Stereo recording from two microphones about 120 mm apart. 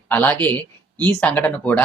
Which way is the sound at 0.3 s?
15° left (ahead or behind).